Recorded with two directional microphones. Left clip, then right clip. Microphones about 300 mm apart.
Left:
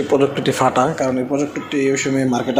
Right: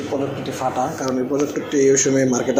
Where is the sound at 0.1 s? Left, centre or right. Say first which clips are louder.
Left 9 dB; left.